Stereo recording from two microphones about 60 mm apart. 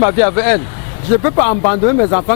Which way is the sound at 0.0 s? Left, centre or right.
Left.